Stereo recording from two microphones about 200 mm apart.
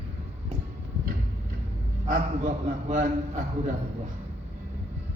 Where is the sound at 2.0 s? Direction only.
40° right (ahead or behind).